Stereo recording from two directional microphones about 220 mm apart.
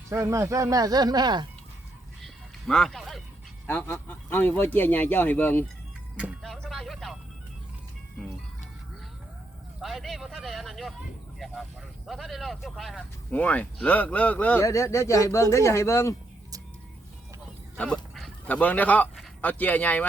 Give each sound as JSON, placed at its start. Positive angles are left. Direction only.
{"t": 0.1, "sound": "speech", "side_deg": -15}
{"t": 2.2, "sound": "a sound", "side_deg": 0}
{"t": 3.7, "sound": "speech", "side_deg": 10}
{"t": 6.1, "sound": "music", "side_deg": 0}
{"t": 9.8, "sound": "speech", "side_deg": 0}
{"t": 11.3, "sound": "vehicle", "side_deg": 0}
{"t": 12.0, "sound": "speech", "side_deg": 0}
{"t": 17.7, "sound": "speech", "side_deg": 5}